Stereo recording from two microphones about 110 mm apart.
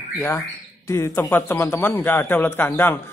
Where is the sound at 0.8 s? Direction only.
25° left (ahead or behind).